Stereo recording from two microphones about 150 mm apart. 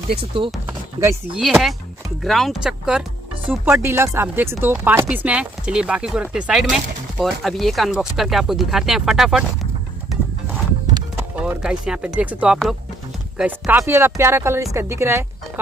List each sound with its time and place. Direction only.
0.1 s speech: 40° right (ahead or behind)
1.3 s speech: centre (ahead or behind)
3.4 s speech: 15° right (ahead or behind)
11.1 s speech: 10° right (ahead or behind)